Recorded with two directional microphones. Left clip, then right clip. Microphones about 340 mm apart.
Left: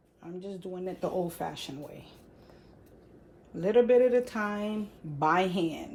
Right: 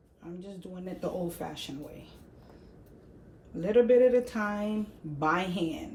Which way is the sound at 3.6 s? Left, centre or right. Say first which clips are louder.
Even; centre.